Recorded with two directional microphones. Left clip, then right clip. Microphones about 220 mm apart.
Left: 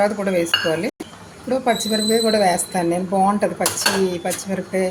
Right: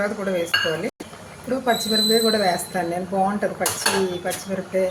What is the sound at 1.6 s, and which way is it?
A woman's voice, 20° left (ahead or behind).